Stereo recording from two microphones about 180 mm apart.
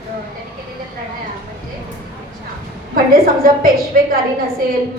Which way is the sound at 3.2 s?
55° right (ahead or behind).